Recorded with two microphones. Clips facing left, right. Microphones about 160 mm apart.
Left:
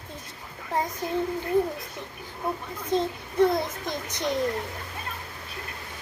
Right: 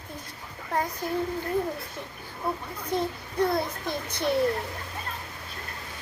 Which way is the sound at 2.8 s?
20° left (ahead or behind).